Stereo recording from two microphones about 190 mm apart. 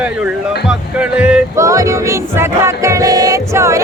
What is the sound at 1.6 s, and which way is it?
Music, 15° right (ahead or behind).